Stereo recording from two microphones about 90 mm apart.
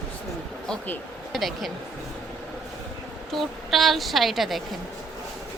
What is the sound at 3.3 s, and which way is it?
A woman's voice, centre (ahead or behind).